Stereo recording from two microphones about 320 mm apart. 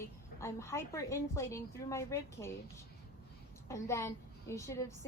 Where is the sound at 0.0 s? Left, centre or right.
Centre.